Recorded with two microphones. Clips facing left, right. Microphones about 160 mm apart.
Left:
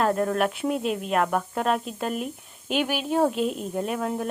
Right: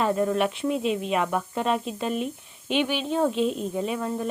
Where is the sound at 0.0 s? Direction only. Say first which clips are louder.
Even; centre (ahead or behind).